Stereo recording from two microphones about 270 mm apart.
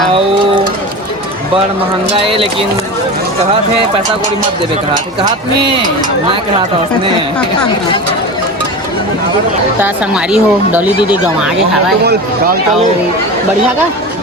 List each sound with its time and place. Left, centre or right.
2.1 s speech: centre
9.8 s speech: centre